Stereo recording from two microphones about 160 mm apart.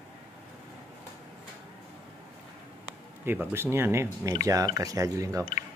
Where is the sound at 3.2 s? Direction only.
15° right (ahead or behind).